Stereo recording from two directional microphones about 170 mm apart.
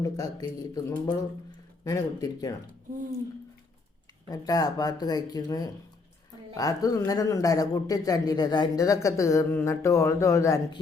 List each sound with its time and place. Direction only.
0.0 s a man's voice: 20° left (ahead or behind)
4.3 s a man's voice: 20° left (ahead or behind)